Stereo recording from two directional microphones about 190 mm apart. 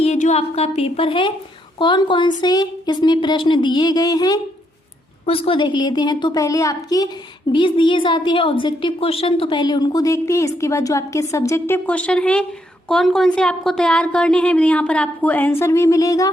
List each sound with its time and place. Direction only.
0.0 s a woman's voice: 35° left (ahead or behind); by 16.3 s 20° left (ahead or behind)